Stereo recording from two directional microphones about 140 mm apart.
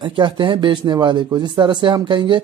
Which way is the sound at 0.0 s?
35° right (ahead or behind).